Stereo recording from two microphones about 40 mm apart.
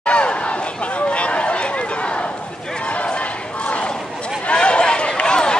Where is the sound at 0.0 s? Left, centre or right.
Left.